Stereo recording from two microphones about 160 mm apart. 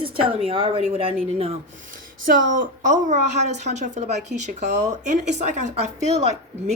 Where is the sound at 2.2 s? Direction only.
55° right (ahead or behind).